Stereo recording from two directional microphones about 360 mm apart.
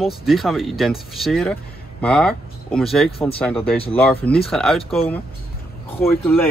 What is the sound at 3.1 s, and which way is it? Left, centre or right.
Speech, centre.